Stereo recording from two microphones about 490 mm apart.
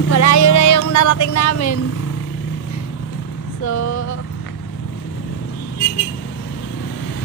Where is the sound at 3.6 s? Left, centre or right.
Left.